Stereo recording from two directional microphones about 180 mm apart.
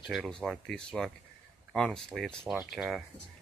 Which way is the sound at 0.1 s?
5° left (ahead or behind).